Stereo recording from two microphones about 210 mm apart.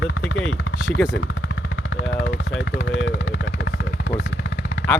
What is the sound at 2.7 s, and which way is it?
Speech, 60° left (ahead or behind).